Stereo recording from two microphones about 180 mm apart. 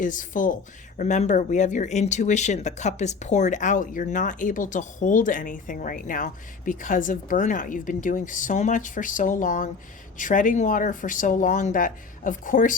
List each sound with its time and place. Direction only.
0.0 s speech: 45° left (ahead or behind)